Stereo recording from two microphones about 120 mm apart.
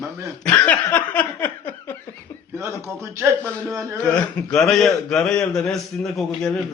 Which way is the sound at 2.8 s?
20° right (ahead or behind).